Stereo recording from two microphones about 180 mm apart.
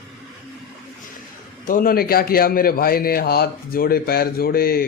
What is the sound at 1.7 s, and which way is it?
A man's voice, 50° left (ahead or behind).